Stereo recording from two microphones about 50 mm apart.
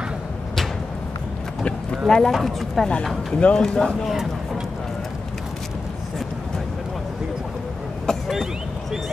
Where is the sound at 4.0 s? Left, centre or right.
Centre.